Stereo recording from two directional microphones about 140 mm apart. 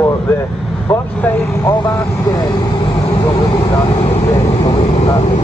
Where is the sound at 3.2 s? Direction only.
25° left (ahead or behind).